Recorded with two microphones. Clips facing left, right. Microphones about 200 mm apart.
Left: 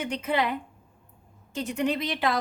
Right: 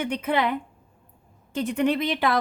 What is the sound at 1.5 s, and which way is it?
Speech, 55° right (ahead or behind).